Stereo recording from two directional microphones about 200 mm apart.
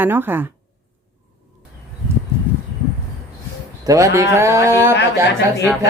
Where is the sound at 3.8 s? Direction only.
15° right (ahead or behind).